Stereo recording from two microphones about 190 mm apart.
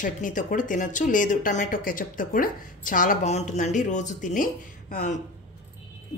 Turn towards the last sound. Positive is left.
turn(degrees=50)  # may be behind; listen again after turning